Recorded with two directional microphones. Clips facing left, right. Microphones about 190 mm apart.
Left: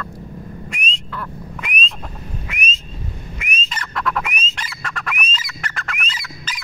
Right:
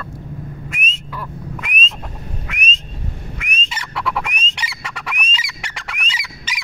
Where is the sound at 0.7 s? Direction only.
5° right (ahead or behind).